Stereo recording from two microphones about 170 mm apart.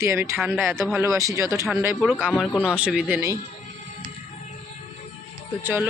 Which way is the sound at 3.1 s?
20° right (ahead or behind).